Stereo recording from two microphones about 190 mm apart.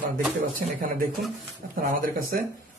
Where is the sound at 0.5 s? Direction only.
45° right (ahead or behind).